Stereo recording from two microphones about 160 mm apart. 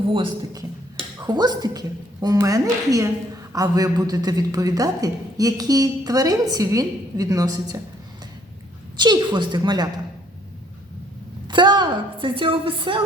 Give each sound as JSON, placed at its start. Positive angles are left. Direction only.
{"t": 1.3, "sound": "a woman's voice", "side_deg": -25}
{"t": 9.0, "sound": "a woman's voice", "side_deg": -25}
{"t": 11.4, "sound": "speech", "side_deg": -30}